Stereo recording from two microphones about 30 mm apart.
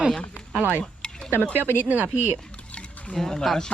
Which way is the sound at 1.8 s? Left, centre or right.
Right.